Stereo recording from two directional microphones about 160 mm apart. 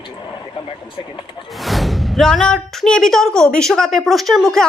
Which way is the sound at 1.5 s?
Centre (ahead or behind).